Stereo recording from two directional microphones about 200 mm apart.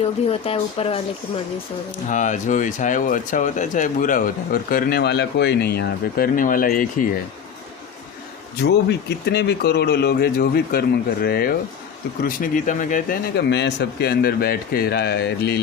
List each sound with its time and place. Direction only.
0.0 s speech: 30° left (ahead or behind)
2.0 s speech: 40° left (ahead or behind)
8.6 s speech: 55° left (ahead or behind); by 13.1 s 40° left (ahead or behind)
13.3 s speech: 60° left (ahead or behind)